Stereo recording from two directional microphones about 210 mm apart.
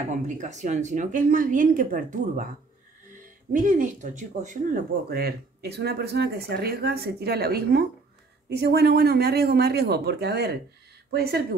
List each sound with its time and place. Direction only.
0.1 s speech: 35° right (ahead or behind)
3.5 s speech: 35° right (ahead or behind)